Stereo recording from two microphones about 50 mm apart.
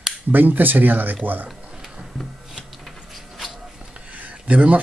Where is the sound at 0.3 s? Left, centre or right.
Right.